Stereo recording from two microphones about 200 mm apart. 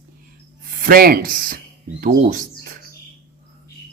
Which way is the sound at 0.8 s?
45° right (ahead or behind).